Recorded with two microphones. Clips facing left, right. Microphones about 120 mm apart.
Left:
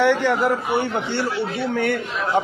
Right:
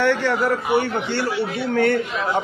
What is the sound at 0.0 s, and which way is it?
A man's voice, 15° left (ahead or behind).